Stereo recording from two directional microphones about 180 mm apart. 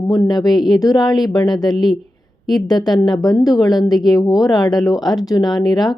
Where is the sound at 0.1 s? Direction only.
20° left (ahead or behind).